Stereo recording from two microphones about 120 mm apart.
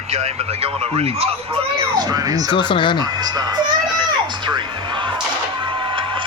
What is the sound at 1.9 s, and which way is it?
Speech, 35° right (ahead or behind).